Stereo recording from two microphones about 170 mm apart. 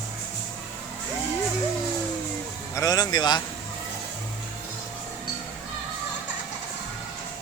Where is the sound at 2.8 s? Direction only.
20° left (ahead or behind).